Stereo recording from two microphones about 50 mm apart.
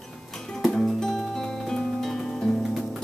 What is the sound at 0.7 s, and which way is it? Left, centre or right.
Music, centre.